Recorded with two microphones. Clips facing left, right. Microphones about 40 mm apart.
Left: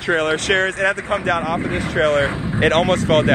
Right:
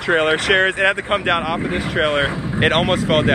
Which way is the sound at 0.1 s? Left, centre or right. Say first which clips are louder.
Right 3 dB; right.